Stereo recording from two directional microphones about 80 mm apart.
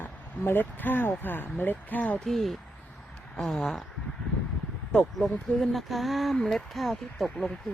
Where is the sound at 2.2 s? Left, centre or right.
Centre.